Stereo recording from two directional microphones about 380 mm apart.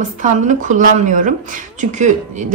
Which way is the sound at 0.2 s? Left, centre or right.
Centre.